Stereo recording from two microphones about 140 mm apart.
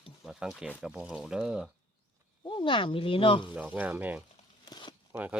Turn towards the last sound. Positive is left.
turn(degrees=-10)  # may be behind; listen again after turning